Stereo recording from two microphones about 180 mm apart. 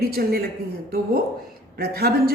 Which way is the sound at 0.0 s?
60° right (ahead or behind).